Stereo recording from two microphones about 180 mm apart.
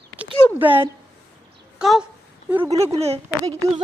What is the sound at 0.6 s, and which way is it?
Speech, 10° right (ahead or behind).